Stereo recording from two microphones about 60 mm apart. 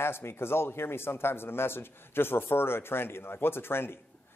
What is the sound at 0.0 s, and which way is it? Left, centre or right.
A man's voice, left.